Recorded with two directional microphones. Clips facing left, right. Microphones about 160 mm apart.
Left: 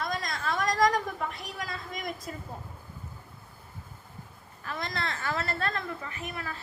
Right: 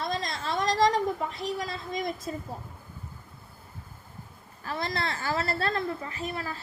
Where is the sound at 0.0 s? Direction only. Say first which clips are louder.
Right 1 dB; 25° right (ahead or behind).